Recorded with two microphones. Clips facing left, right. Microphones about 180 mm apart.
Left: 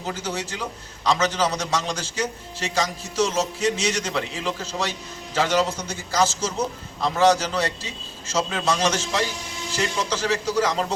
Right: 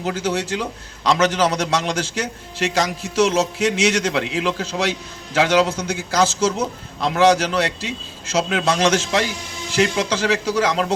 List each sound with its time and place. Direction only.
0.0 s a man's voice: 70° right (ahead or behind)